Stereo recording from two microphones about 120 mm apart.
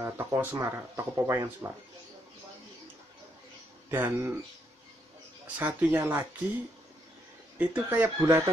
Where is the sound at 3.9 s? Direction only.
20° right (ahead or behind).